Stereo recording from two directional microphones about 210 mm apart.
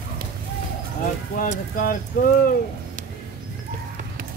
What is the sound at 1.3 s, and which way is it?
Speech, 40° left (ahead or behind).